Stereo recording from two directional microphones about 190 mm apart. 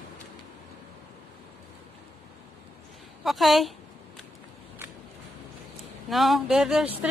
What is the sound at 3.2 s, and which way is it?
Speech, centre (ahead or behind).